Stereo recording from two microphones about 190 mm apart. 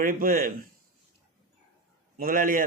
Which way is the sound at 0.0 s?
45° right (ahead or behind).